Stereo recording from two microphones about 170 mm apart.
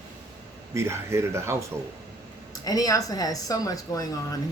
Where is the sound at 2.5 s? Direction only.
20° left (ahead or behind).